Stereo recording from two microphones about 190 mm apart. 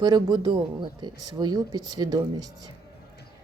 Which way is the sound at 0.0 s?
20° right (ahead or behind).